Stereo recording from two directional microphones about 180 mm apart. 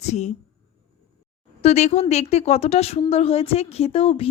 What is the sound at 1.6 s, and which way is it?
A woman's voice, 40° left (ahead or behind).